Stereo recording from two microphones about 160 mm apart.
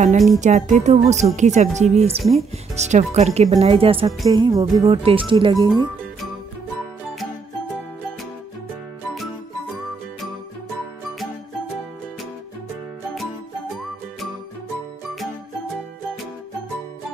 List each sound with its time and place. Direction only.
0.4 s speech: 50° right (ahead or behind)
4.3 s music: 25° right (ahead or behind)
4.8 s speech: 35° right (ahead or behind)
13.1 s music: centre (ahead or behind)